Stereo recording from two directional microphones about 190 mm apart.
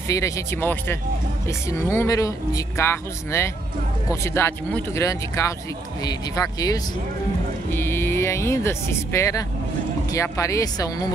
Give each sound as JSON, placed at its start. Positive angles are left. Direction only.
{"t": 0.1, "sound": "speech", "side_deg": 15}